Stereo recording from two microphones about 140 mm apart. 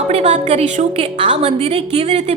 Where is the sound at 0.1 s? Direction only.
50° right (ahead or behind).